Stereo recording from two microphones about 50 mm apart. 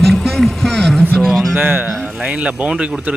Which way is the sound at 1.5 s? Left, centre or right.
Right.